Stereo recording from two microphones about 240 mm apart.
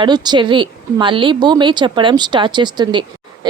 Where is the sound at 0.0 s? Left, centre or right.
Centre.